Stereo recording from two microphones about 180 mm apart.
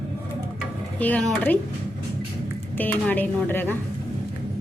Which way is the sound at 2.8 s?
10° left (ahead or behind).